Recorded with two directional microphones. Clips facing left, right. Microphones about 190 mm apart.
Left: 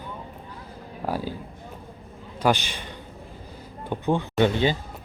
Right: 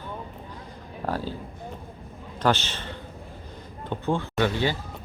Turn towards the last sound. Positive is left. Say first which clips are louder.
# left 3 dB
turn(degrees=20)  # may be behind; listen again after turning